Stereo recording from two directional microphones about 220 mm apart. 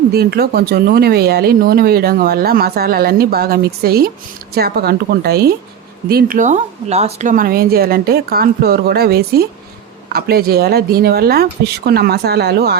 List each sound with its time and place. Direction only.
0.1 s speech: 45° right (ahead or behind)